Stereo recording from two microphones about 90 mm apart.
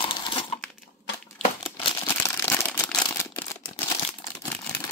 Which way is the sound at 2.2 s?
30° left (ahead or behind).